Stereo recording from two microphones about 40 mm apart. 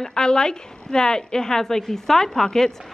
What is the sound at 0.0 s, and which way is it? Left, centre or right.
A woman's voice, centre.